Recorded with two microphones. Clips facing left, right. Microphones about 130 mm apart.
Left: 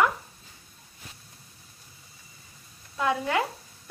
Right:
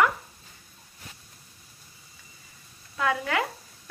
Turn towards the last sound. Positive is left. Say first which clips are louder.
# left 1 dB
turn(degrees=25)  # may be behind; listen again after turning